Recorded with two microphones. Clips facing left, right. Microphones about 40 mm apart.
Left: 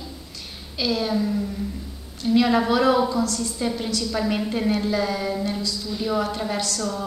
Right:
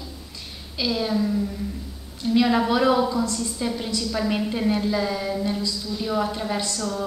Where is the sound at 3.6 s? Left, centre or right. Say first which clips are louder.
Left 2 dB; centre.